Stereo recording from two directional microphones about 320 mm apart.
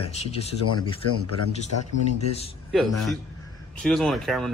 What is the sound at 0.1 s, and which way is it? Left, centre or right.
Speech, centre.